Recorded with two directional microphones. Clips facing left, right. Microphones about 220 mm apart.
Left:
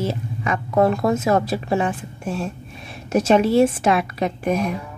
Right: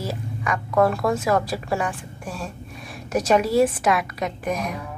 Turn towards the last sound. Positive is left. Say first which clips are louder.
# left 5 dB
turn(degrees=30)  # may be behind; listen again after turning